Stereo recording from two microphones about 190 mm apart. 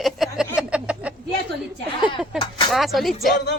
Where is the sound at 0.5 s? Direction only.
5° right (ahead or behind).